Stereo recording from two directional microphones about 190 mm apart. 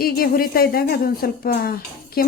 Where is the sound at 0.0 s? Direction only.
50° left (ahead or behind).